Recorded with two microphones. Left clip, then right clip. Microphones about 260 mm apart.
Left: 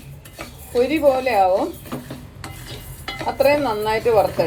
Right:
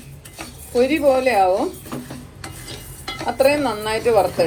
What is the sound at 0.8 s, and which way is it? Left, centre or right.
Speech, right.